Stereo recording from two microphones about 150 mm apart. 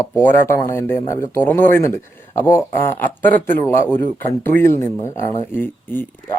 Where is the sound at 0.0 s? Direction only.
15° left (ahead or behind).